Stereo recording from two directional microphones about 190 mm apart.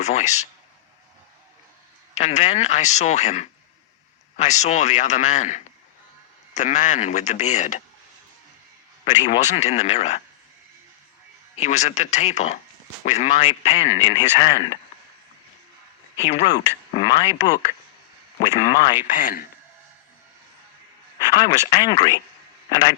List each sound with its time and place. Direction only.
0.0 s a man's voice: 35° left (ahead or behind)
2.1 s a man's voice: 35° left (ahead or behind)
9.4 s a man's voice: 35° left (ahead or behind)
11.6 s a man's voice: 35° left (ahead or behind)
16.4 s speech: 20° left (ahead or behind)
19.0 s a man's voice: 45° left (ahead or behind)
21.3 s speech: 25° left (ahead or behind)